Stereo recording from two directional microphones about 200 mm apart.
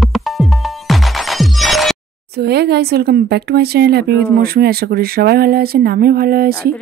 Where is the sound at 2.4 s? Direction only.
55° right (ahead or behind).